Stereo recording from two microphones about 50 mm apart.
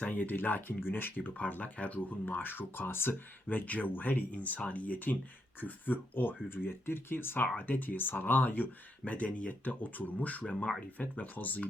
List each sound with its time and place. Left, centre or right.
0.0 s speech: left
3.5 s speech: left
7.4 s speech: left
7.8 s speech: left